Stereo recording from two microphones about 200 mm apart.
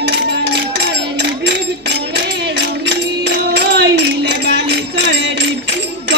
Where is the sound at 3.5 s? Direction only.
60° right (ahead or behind).